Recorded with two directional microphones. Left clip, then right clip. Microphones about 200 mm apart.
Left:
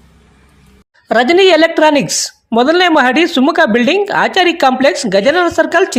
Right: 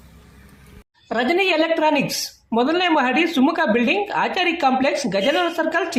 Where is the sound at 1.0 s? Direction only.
40° left (ahead or behind).